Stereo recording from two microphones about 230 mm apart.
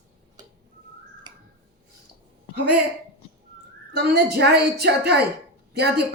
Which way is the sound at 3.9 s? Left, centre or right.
Right.